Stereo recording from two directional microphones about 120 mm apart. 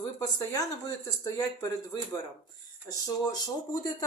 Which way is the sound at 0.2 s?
30° left (ahead or behind).